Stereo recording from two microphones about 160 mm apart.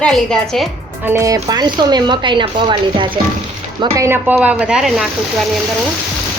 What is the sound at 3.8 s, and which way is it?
Speech, 20° right (ahead or behind).